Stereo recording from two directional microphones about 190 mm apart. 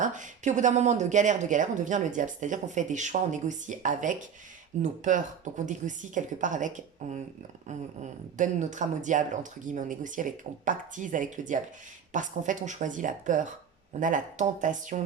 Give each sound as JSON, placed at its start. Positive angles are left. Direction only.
{"t": 0.0, "sound": "a woman's voice", "side_deg": -40}